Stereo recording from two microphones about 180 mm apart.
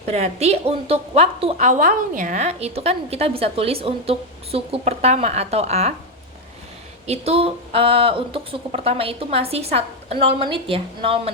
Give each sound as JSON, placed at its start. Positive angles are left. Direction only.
{"t": 0.0, "sound": "a woman's voice", "side_deg": -40}
{"t": 7.1, "sound": "a woman's voice", "side_deg": -35}